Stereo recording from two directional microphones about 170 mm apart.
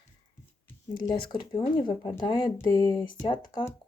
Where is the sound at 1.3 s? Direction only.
30° left (ahead or behind).